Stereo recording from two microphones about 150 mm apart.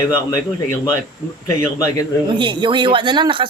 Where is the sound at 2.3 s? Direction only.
30° right (ahead or behind).